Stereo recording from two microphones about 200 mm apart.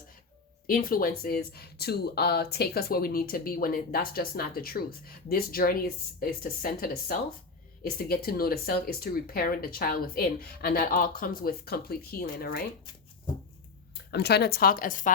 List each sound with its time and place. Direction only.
0.7 s speech: 45° left (ahead or behind)
14.1 s speech: 55° left (ahead or behind)